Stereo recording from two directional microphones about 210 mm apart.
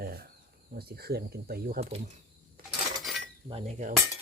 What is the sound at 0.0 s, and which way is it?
Cricket, 45° right (ahead or behind).